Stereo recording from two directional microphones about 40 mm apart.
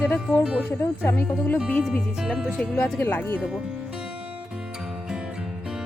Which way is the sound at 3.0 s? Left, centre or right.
Left.